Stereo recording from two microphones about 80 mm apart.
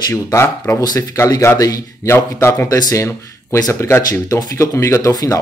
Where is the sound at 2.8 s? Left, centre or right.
Left.